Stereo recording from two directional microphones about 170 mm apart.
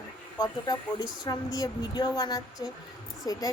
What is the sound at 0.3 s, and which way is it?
Speech, 20° left (ahead or behind).